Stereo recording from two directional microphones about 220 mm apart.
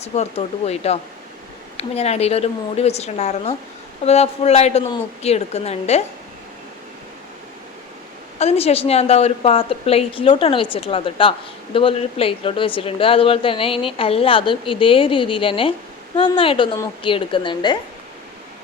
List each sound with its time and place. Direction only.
0.0 s a woman's voice: 30° left (ahead or behind)
8.4 s a woman's voice: 30° left (ahead or behind)